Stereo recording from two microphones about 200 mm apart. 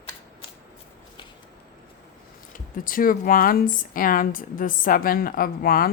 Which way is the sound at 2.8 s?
45° left (ahead or behind).